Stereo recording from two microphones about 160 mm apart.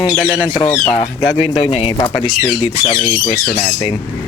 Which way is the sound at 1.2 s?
35° left (ahead or behind).